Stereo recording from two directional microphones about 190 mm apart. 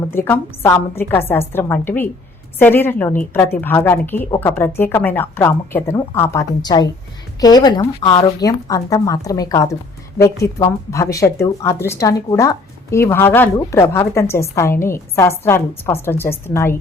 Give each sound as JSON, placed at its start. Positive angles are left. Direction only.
{"t": 0.1, "sound": "a woman's voice", "side_deg": 10}